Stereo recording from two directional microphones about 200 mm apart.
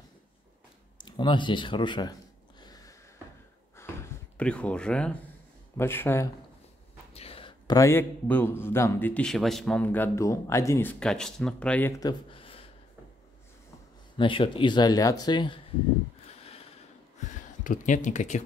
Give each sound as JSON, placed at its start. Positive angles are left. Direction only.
{"t": 0.9, "sound": "speech", "side_deg": 20}
{"t": 2.6, "sound": "a sound", "side_deg": 20}
{"t": 3.7, "sound": "gasp", "side_deg": 10}
{"t": 5.8, "sound": "a man's voice", "side_deg": 10}
{"t": 7.2, "sound": "a man's voice", "side_deg": 30}
{"t": 12.0, "sound": "a sound", "side_deg": 25}
{"t": 14.1, "sound": "speech", "side_deg": 25}
{"t": 17.2, "sound": "speech", "side_deg": 40}